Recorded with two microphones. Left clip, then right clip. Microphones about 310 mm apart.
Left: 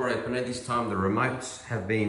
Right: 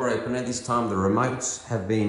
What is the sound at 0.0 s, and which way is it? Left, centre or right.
A man's voice, centre.